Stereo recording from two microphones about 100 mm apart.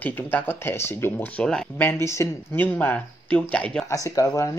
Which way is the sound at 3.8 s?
35° left (ahead or behind).